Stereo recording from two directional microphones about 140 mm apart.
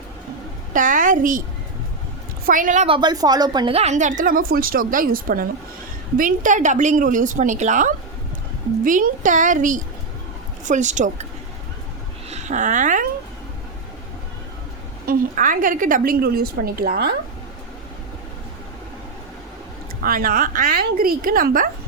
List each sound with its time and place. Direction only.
0.7 s a woman's voice: 70° right (ahead or behind)
2.5 s a woman's voice: 70° right (ahead or behind)
2.8 s speech: 35° right (ahead or behind)
3.8 s a woman's voice: 55° right (ahead or behind); by 5.5 s 90° right
6.1 s a woman's voice: 70° right (ahead or behind)
8.8 s a woman's voice: 75° right (ahead or behind)
12.3 s speech: 55° right (ahead or behind)
15.0 s a woman's voice: 85° right
20.0 s a woman's voice: 90° right